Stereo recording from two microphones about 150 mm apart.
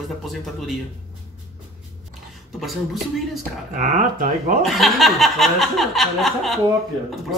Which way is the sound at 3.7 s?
55° right (ahead or behind).